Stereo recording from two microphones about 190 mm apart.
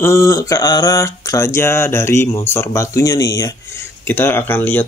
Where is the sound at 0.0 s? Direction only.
15° left (ahead or behind).